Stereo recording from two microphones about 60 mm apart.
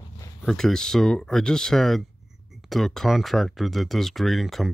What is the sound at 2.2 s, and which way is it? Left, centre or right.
Speech, centre.